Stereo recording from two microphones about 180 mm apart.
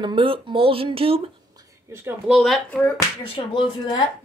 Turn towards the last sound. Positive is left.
turn(degrees=25)  # may be behind; listen again after turning